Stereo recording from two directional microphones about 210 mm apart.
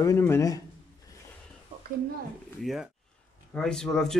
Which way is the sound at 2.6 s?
Centre (ahead or behind).